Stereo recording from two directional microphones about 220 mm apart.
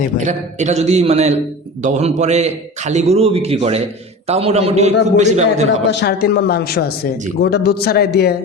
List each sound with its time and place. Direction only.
0.2 s a man's voice: 30° right (ahead or behind)
5.9 s speech: 50° left (ahead or behind)